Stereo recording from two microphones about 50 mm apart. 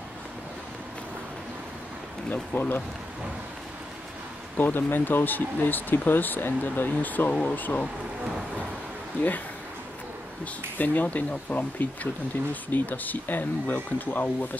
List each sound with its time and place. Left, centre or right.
2.3 s speech: left
4.6 s speech: left
9.2 s speech: left
10.4 s speech: left